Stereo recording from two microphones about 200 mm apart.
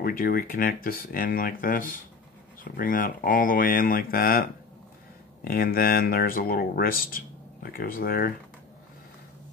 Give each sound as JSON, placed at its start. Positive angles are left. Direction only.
{"t": 0.0, "sound": "speech", "side_deg": 45}